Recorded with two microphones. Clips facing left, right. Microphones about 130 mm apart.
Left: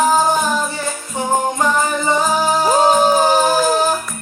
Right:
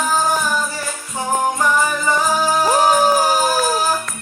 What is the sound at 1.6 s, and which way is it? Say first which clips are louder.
Music: left 1 dB; 20° left (ahead or behind).